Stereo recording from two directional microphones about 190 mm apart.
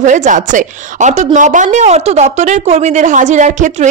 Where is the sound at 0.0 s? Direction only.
40° right (ahead or behind).